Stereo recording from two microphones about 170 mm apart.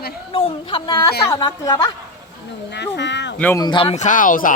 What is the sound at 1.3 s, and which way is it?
Speech, 25° left (ahead or behind).